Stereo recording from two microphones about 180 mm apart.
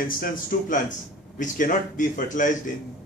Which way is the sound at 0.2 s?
50° left (ahead or behind).